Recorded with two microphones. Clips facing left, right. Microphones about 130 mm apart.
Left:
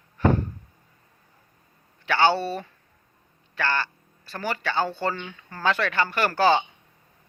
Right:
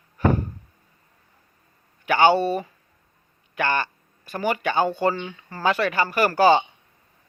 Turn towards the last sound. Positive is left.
turn(degrees=-10)  # may be behind; listen again after turning